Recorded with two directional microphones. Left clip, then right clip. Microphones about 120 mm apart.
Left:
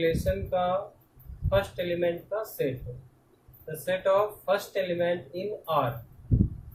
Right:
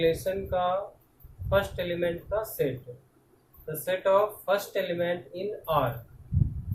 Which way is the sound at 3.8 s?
20° right (ahead or behind).